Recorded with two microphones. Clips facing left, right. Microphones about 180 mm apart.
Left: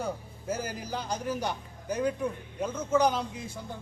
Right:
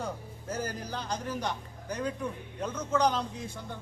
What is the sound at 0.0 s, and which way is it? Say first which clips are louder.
A man's voice: left 3 dB; 5° left (ahead or behind).